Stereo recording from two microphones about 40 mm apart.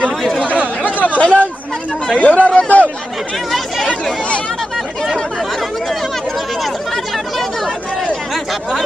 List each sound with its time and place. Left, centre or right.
0.8 s chatter: left
3.5 s chatter: centre